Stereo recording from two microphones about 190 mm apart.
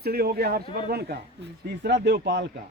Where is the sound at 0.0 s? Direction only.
55° right (ahead or behind).